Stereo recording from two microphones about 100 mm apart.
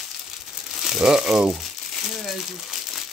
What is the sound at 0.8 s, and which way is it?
Speech, 5° right (ahead or behind).